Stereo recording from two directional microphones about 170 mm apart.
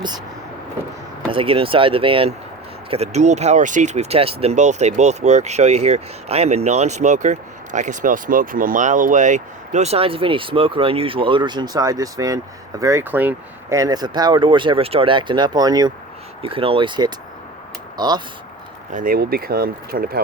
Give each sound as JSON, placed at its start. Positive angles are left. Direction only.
{"t": 1.3, "sound": "speech", "side_deg": -30}
{"t": 18.9, "sound": "speech", "side_deg": -60}